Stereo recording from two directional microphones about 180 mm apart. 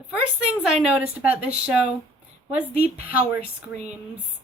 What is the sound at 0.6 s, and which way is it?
Speech, 5° right (ahead or behind).